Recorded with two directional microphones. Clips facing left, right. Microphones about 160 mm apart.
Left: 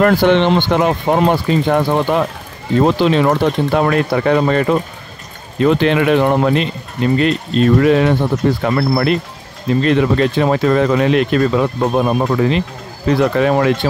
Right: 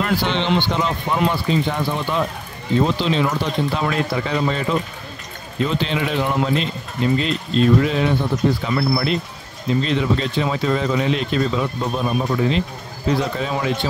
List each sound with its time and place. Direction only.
0.0 s speech: 55° left (ahead or behind)